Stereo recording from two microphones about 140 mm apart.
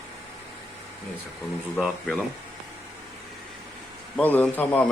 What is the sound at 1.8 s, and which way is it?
Speech, 5° right (ahead or behind).